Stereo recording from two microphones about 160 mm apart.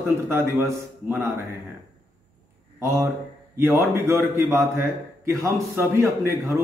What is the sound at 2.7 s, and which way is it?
A man's voice, 15° right (ahead or behind).